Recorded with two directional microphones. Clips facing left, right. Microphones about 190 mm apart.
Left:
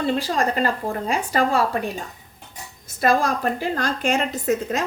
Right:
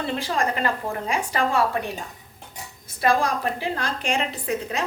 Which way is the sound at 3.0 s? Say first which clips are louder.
Left 2 dB; 45° left (ahead or behind).